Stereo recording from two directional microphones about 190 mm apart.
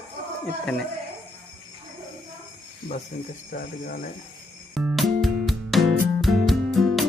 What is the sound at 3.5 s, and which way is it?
Speech, 50° left (ahead or behind).